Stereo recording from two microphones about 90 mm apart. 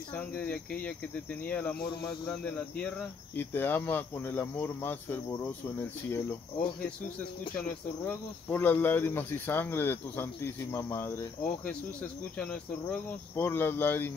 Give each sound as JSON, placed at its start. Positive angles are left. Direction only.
{"t": 0.1, "sound": "speech", "side_deg": 15}
{"t": 7.6, "sound": "speech", "side_deg": 20}
{"t": 12.4, "sound": "speech", "side_deg": 15}
{"t": 13.4, "sound": "speech", "side_deg": 25}